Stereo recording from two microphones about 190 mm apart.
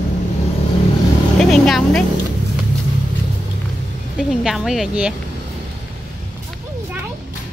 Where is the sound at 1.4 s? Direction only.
Centre (ahead or behind).